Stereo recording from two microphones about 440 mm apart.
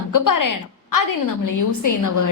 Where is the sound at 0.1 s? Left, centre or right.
Left.